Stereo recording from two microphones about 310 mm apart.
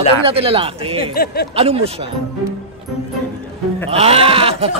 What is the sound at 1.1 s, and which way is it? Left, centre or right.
Speech, left.